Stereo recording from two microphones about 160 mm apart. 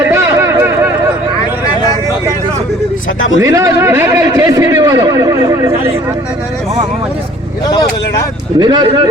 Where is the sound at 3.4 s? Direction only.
20° right (ahead or behind).